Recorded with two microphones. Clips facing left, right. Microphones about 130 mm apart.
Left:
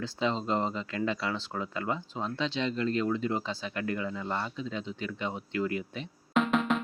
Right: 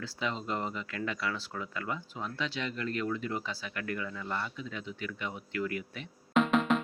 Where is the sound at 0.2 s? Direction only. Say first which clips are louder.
Left 5 dB; 30° left (ahead or behind).